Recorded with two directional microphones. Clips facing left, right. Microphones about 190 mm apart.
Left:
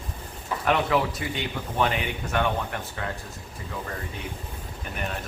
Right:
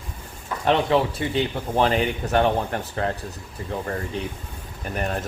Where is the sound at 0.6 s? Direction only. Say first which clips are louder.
Right 4 dB; 30° right (ahead or behind).